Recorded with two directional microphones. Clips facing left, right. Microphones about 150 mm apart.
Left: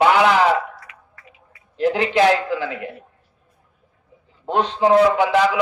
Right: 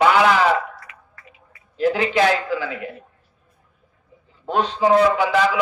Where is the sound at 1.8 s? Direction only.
20° left (ahead or behind).